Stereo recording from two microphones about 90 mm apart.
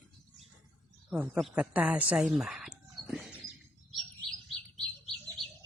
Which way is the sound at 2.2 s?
5° right (ahead or behind).